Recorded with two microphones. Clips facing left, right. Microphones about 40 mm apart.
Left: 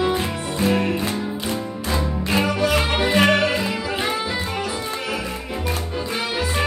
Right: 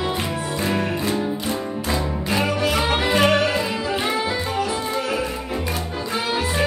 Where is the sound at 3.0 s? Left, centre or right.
Left.